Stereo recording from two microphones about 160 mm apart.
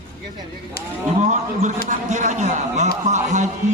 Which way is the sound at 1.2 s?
50° right (ahead or behind).